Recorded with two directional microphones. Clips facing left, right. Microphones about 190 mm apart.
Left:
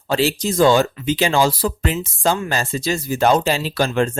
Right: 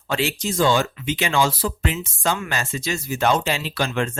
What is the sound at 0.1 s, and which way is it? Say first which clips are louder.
Speech: left 5 dB; 35° left (ahead or behind).